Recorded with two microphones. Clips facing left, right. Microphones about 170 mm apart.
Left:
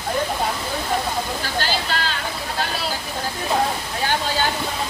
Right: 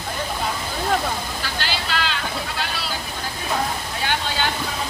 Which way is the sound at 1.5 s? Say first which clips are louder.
Left 2 dB; 45° left (ahead or behind).